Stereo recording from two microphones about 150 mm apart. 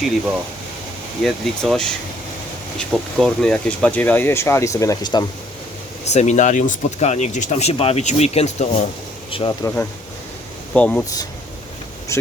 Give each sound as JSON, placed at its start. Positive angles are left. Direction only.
{"t": 1.2, "sound": "speech", "side_deg": 0}
{"t": 6.1, "sound": "speech", "side_deg": 50}
{"t": 9.3, "sound": "speech", "side_deg": 35}
{"t": 10.8, "sound": "speech", "side_deg": 5}